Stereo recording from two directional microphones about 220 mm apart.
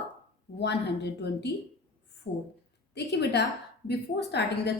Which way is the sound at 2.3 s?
50° left (ahead or behind).